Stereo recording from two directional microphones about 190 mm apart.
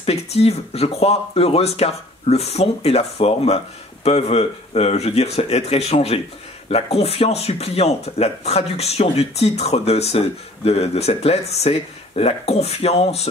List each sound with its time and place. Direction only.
0.0 s speech: 30° left (ahead or behind)